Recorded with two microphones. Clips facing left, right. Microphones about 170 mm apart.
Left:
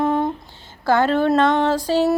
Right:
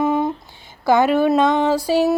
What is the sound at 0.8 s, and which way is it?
Music, 15° right (ahead or behind).